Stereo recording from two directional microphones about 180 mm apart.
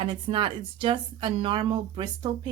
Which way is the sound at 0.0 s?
30° right (ahead or behind).